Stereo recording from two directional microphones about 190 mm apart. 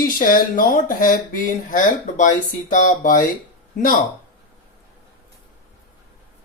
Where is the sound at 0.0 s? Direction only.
45° left (ahead or behind).